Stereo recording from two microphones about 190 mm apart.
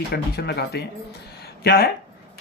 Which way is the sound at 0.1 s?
55° left (ahead or behind).